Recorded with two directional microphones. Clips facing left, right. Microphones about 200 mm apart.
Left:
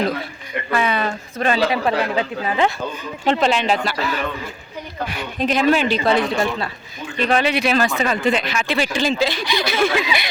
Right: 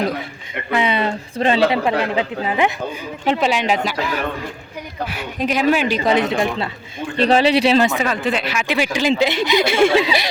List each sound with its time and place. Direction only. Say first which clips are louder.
0.7 s speech: right 2 dB; 20° right (ahead or behind)
3.2 s speech: even; 10° right (ahead or behind)
8.0 s speech: left 1 dB; centre (ahead or behind); by 10.2 s 30° right (ahead or behind)